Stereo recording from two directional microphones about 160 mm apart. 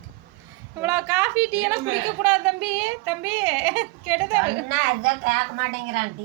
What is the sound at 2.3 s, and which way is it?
Speech, 10° right (ahead or behind).